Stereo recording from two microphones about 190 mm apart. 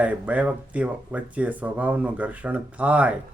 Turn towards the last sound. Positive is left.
turn(degrees=-5)  # may be behind; listen again after turning